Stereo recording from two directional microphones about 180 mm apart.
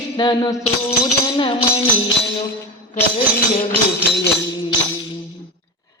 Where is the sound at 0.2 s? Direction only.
20° left (ahead or behind).